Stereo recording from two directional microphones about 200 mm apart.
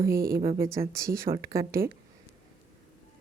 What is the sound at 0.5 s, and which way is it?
Speech, 15° right (ahead or behind).